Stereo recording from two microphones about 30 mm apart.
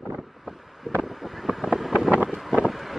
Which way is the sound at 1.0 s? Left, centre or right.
Centre.